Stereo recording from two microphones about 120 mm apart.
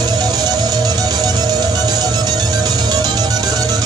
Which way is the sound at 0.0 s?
35° right (ahead or behind).